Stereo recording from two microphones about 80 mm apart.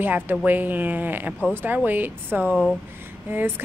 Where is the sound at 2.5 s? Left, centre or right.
Centre.